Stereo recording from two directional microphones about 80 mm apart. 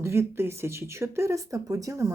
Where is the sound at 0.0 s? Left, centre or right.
Right.